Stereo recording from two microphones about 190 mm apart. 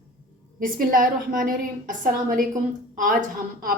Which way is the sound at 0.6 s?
45° right (ahead or behind).